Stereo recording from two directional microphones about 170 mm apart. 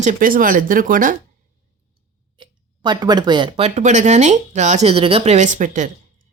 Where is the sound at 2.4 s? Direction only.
25° right (ahead or behind).